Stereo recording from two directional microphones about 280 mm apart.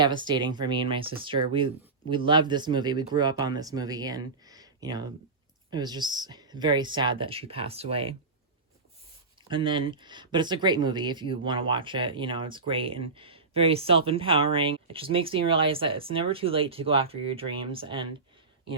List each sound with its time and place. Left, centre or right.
0.0 s speech: centre
9.5 s speech: centre